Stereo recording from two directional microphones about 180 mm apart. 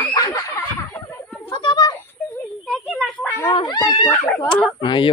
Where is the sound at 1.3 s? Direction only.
10° left (ahead or behind).